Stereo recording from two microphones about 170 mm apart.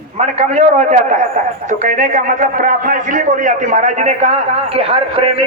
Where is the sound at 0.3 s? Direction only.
40° right (ahead or behind).